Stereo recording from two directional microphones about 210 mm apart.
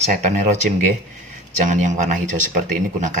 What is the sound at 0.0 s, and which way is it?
Speech, 35° right (ahead or behind).